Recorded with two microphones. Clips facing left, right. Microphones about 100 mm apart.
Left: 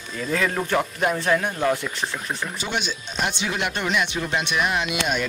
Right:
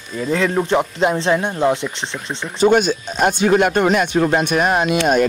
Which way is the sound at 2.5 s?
45° right (ahead or behind).